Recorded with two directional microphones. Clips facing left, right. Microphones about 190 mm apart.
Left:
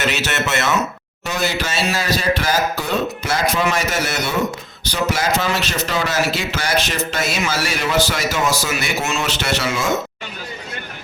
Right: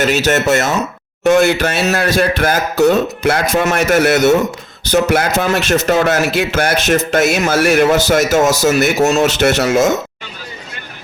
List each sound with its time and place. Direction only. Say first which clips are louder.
0.0 s speech: right 8 dB; 40° right (ahead or behind)
1.2 s speech: right 12 dB; 50° right (ahead or behind)